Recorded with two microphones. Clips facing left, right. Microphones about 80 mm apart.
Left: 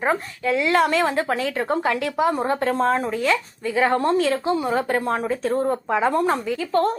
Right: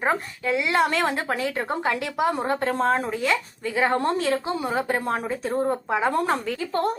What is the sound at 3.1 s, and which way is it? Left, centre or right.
Speech, right.